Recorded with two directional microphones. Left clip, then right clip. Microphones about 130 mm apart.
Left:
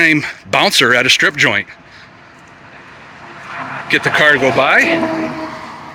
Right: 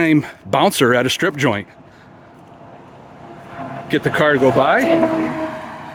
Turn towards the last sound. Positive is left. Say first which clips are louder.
# even
turn(degrees=-10)  # may be behind; listen again after turning